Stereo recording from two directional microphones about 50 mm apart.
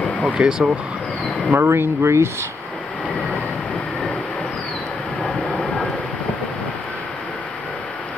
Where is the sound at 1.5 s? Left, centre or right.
Right.